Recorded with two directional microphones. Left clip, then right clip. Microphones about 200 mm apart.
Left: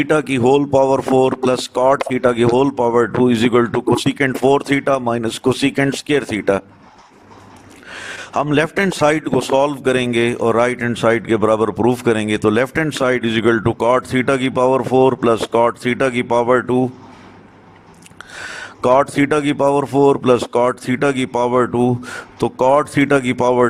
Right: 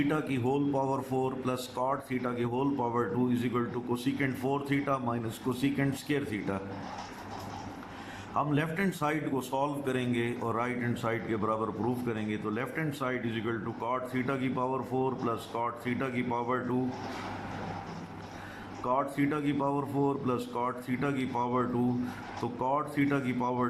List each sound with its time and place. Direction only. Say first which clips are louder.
0.1 s speech: left 17 dB; 50° left (ahead or behind)
8.3 s a man's voice: left 14 dB; 50° left (ahead or behind)
18.8 s a man's voice: left 16 dB; 55° left (ahead or behind)